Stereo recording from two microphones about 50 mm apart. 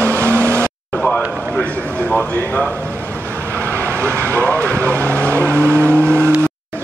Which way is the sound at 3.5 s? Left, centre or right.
Right.